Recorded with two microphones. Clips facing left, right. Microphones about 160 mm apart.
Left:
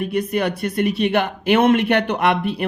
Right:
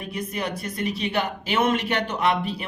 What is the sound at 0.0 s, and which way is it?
A man's voice, 65° left (ahead or behind).